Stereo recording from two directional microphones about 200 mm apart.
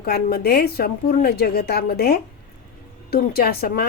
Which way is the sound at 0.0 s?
50° left (ahead or behind).